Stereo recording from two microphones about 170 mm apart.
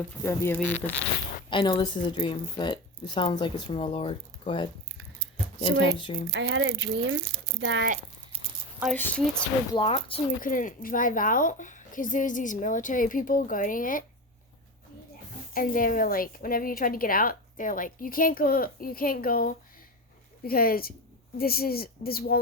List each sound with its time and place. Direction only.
0.2 s speech: 15° left (ahead or behind)
1.5 s a woman's voice: 30° left (ahead or behind)
6.0 s a woman's voice: 30° left (ahead or behind)
6.3 s speech: 90° right
9.0 s speech: 10° left (ahead or behind)
9.7 s speech: 35° left (ahead or behind)
10.4 s a woman's voice: 50° left (ahead or behind)
15.5 s a woman's voice: 55° left (ahead or behind)